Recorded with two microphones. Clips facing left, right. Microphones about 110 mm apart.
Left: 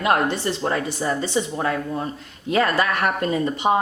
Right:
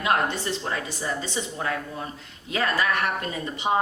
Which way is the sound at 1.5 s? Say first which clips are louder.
Left 6 dB; 40° left (ahead or behind).